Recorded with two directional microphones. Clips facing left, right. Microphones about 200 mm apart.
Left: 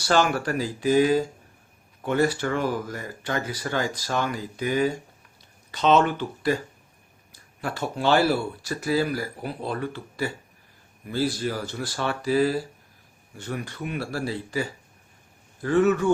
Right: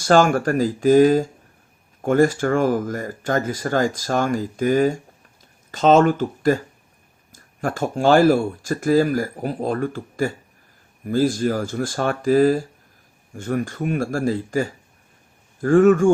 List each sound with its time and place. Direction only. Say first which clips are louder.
0.0 s speech: right 6 dB; 45° right (ahead or behind)